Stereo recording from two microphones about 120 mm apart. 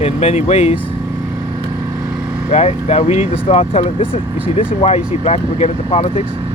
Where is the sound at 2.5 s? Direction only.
65° left (ahead or behind).